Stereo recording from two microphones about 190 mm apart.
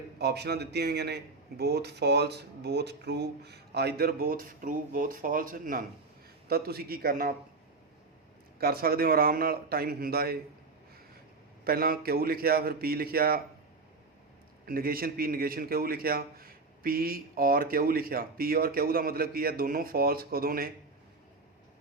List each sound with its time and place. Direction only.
0.2 s a man's voice: 60° right (ahead or behind)
8.5 s a man's voice: 55° right (ahead or behind)
11.6 s a man's voice: 50° right (ahead or behind)
14.7 s a man's voice: 50° right (ahead or behind)